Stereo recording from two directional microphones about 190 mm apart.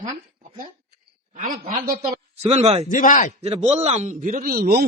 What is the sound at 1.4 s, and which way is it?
Speech, 45° right (ahead or behind).